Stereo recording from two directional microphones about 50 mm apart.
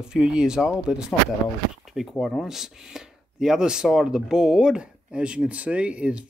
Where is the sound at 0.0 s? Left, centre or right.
Centre.